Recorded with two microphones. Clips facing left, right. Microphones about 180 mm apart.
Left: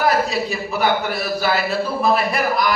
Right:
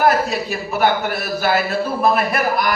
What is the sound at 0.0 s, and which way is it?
A man's voice, 50° right (ahead or behind).